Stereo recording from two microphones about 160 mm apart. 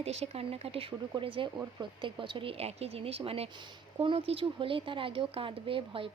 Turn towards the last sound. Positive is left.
turn(degrees=-35)  # may be behind; listen again after turning